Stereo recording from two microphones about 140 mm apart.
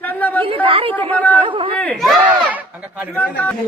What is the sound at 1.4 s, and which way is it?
Chatter, 35° right (ahead or behind).